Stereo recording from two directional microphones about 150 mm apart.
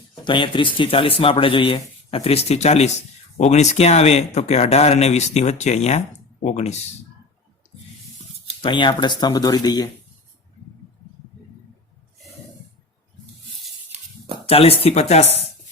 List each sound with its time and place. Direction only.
0.3 s speech: 30° left (ahead or behind); by 6.7 s 50° left (ahead or behind)
8.6 s speech: 30° left (ahead or behind)
14.4 s speech: 40° left (ahead or behind)